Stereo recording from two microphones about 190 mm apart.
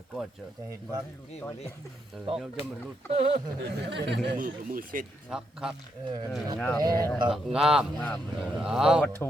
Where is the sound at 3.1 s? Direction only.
30° right (ahead or behind).